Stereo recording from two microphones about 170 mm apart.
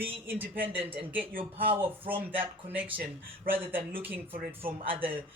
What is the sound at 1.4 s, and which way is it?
Speech, 10° right (ahead or behind).